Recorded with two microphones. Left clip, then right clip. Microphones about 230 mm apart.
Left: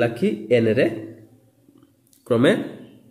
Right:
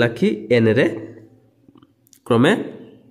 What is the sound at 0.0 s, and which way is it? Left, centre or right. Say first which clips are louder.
Speech: right 3 dB; right.